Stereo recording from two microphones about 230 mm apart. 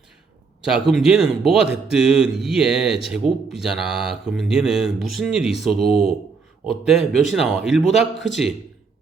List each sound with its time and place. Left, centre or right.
0.6 s speech: centre
5.9 s speech: left
6.7 s speech: centre